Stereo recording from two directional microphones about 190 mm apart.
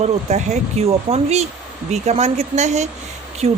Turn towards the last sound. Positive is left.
turn(degrees=-35)  # may be behind; listen again after turning